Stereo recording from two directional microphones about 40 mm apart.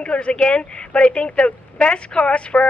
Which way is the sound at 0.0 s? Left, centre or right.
Left.